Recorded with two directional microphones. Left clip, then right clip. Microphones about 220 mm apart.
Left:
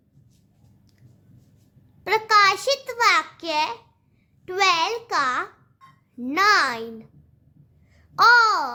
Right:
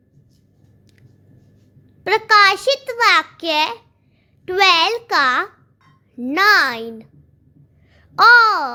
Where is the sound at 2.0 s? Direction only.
15° right (ahead or behind).